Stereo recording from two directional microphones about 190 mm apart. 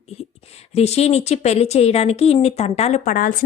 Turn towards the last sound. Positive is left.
turn(degrees=45)  # may be behind; listen again after turning